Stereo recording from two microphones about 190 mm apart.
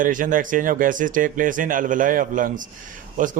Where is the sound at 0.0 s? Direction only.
45° right (ahead or behind).